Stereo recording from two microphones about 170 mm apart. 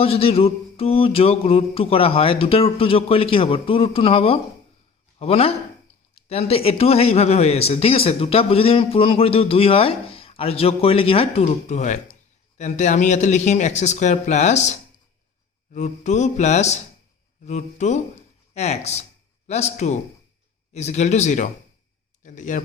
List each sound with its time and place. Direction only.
0.0 s a man's voice: 35° left (ahead or behind)